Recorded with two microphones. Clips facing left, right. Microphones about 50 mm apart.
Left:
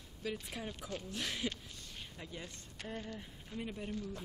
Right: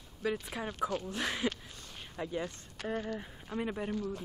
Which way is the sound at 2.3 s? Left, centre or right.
Right.